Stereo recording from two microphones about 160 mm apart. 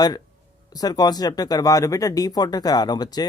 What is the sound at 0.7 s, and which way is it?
Speech, 25° left (ahead or behind).